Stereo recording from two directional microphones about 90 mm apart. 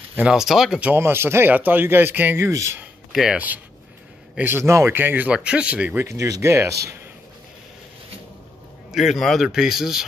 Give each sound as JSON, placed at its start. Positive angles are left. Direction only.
{"t": 0.3, "sound": "speech", "side_deg": -5}
{"t": 1.0, "sound": "a man's voice", "side_deg": -25}
{"t": 3.1, "sound": "speech", "side_deg": -5}
{"t": 3.3, "sound": "a man's voice", "side_deg": -20}
{"t": 5.9, "sound": "a man's voice", "side_deg": -35}
{"t": 8.9, "sound": "a man's voice", "side_deg": -5}